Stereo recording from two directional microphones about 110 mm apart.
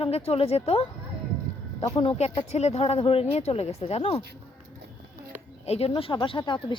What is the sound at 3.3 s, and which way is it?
Speech, 75° left (ahead or behind).